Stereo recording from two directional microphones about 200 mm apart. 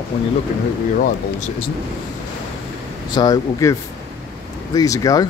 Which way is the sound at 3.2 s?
20° left (ahead or behind).